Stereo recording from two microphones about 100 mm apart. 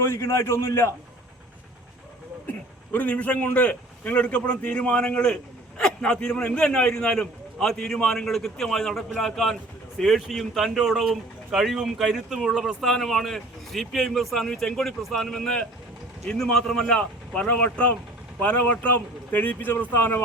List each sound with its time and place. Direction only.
0.0 s a man's voice: 25° left (ahead or behind)
2.5 s a man's voice: 15° left (ahead or behind)